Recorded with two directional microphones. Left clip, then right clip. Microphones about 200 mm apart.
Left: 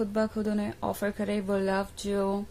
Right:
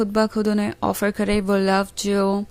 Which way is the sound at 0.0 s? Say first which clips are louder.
Right 9 dB; 35° right (ahead or behind).